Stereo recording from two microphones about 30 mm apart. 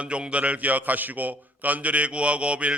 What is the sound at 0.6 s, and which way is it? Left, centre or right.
A man's voice, right.